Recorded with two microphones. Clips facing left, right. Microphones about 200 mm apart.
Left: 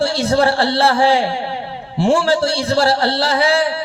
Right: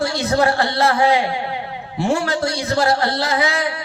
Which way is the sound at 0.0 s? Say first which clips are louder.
Left 3 dB; 30° left (ahead or behind).